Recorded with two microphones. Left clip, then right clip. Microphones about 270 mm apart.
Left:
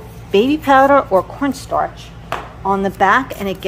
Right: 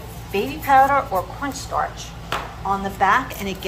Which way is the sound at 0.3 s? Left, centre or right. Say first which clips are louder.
Left 6 dB; left.